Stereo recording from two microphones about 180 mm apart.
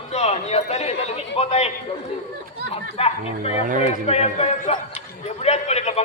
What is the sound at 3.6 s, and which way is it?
Speech, 50° right (ahead or behind).